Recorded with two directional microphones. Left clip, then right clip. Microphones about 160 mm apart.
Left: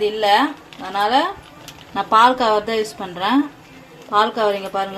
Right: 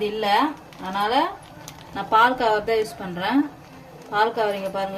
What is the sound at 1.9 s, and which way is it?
Speech, 35° left (ahead or behind).